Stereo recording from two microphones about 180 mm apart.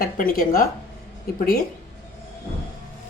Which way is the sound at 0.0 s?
50° left (ahead or behind).